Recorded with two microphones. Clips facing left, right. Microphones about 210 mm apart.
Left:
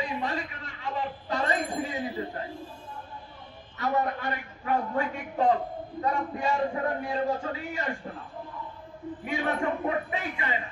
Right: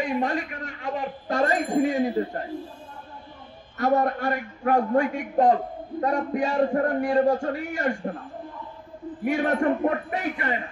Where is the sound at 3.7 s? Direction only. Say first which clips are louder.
Right 6 dB; 50° right (ahead or behind).